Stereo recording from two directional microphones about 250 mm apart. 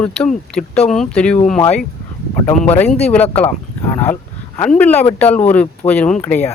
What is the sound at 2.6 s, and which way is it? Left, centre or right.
Speech, centre.